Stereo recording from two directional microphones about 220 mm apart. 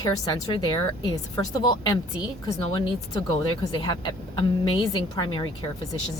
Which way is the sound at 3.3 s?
20° left (ahead or behind).